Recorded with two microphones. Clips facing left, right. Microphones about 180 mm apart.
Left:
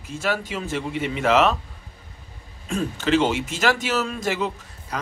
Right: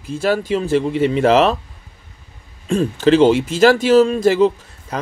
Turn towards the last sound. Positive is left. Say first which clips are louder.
# right 10 dB
turn(degrees=-30)  # may be behind; listen again after turning